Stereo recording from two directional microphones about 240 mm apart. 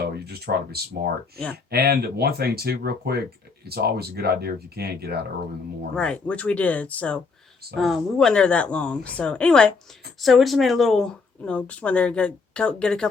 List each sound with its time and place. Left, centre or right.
0.0 s speech: right
6.0 s speech: centre